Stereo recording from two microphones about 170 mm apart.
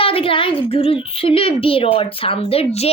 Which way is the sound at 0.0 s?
30° left (ahead or behind).